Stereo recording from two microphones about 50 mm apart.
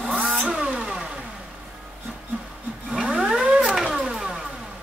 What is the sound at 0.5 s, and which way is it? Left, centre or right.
Vehicle, centre.